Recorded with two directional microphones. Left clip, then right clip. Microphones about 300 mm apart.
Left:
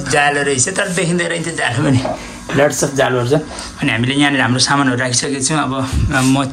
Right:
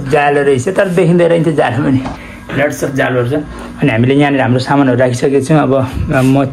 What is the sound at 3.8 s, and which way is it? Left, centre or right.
Speech, centre.